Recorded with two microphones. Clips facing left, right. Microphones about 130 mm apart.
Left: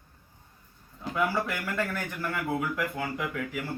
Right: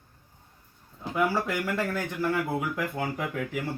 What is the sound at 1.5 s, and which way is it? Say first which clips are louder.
Speech: right 3 dB; 20° right (ahead or behind).